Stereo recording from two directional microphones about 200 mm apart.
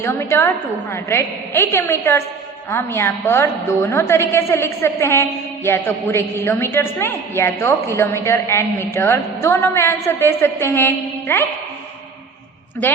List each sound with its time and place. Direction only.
0.0 s a woman's voice: 15° left (ahead or behind)